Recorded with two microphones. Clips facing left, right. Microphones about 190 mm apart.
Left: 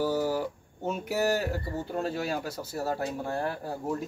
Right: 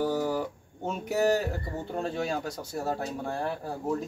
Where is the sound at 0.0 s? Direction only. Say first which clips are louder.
Even; 5° left (ahead or behind).